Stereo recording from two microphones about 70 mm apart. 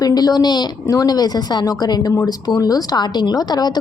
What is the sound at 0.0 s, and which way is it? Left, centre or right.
A woman's voice, left.